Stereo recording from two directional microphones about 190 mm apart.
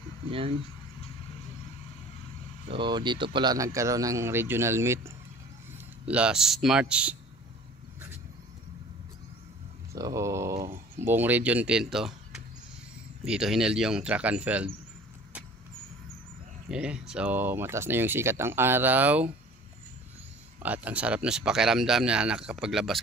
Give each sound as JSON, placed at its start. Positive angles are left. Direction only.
{"t": 2.7, "sound": "speech", "side_deg": -25}
{"t": 9.9, "sound": "speech", "side_deg": -15}
{"t": 16.7, "sound": "speech", "side_deg": -5}
{"t": 20.6, "sound": "speech", "side_deg": -10}